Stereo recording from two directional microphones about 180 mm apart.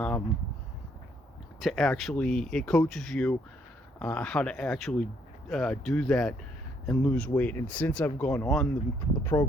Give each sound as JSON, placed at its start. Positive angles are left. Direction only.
{"t": 1.6, "sound": "speech", "side_deg": 0}